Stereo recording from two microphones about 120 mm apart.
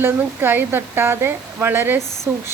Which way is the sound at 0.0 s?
20° right (ahead or behind).